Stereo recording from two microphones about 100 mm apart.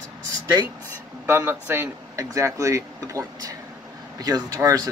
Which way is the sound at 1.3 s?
25° right (ahead or behind).